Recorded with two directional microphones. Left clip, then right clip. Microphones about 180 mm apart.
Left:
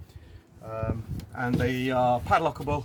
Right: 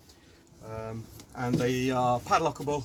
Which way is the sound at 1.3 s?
10° left (ahead or behind).